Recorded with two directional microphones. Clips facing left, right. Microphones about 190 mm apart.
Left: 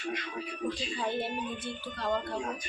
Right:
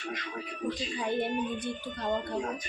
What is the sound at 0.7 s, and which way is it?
Speech, 20° right (ahead or behind).